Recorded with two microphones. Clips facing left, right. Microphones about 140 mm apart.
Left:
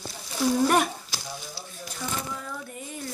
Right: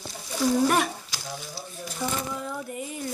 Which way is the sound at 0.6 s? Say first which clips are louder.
Left 4 dB; centre (ahead or behind).